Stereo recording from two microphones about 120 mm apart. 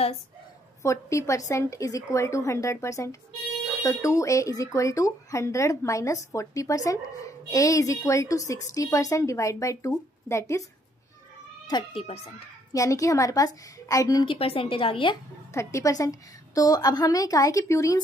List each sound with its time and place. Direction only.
0.8 s speech: 25° left (ahead or behind)
11.6 s speech: 40° left (ahead or behind)
12.7 s speech: 30° left (ahead or behind)
14.2 s a woman's voice: 50° left (ahead or behind)
15.5 s speech: 25° left (ahead or behind)